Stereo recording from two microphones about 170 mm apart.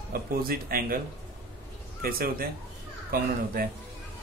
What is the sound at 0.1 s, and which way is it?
Speech, 60° right (ahead or behind).